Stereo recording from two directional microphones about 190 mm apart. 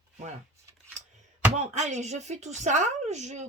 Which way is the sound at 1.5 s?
35° right (ahead or behind).